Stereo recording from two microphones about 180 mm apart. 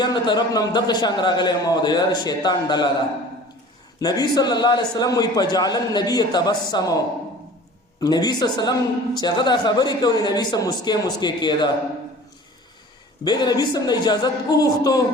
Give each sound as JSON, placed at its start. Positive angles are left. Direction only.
{"t": 0.0, "sound": "a man's voice", "side_deg": 25}
{"t": 4.0, "sound": "a man's voice", "side_deg": 20}
{"t": 8.0, "sound": "a man's voice", "side_deg": 20}
{"t": 13.2, "sound": "a man's voice", "side_deg": 25}